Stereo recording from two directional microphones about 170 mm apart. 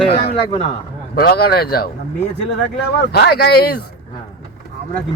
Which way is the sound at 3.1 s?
70° left (ahead or behind).